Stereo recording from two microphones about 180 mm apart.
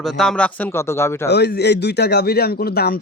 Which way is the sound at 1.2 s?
65° left (ahead or behind).